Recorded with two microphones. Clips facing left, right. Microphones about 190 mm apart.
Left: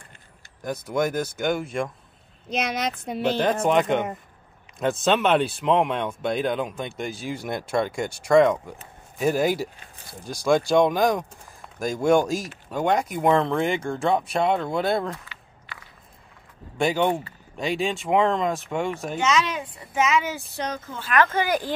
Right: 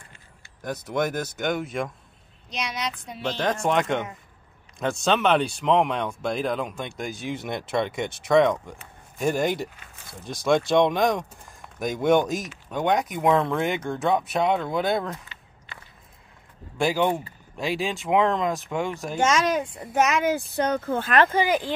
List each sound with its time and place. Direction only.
0.6 s speech: centre (ahead or behind)
2.5 s speech: 50° left (ahead or behind)
3.2 s speech: 10° left (ahead or behind)
16.7 s speech: centre (ahead or behind)
19.1 s speech: 45° right (ahead or behind)